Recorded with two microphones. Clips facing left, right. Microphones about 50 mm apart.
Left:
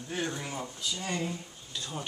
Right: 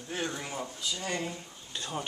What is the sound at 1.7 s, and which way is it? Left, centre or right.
Speech, right.